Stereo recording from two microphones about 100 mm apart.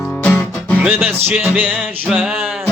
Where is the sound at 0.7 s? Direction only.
20° right (ahead or behind).